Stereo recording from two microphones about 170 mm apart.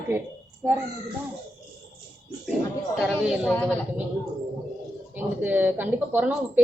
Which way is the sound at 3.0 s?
5° left (ahead or behind).